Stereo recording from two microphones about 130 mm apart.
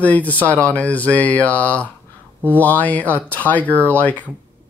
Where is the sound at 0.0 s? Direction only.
10° left (ahead or behind).